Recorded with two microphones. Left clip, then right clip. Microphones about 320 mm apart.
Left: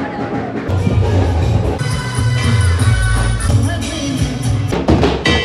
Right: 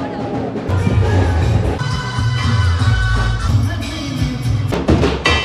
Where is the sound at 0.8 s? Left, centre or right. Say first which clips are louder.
Even; centre.